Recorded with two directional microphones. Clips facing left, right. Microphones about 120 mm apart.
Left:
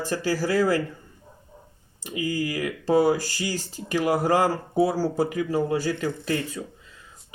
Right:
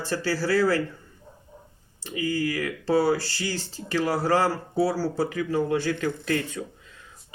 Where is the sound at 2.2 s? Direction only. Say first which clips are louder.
Even; 15° left (ahead or behind).